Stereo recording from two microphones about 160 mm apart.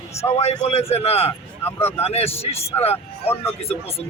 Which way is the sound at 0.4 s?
40° left (ahead or behind).